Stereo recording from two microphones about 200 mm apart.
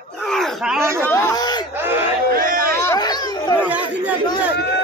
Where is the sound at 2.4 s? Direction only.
45° right (ahead or behind).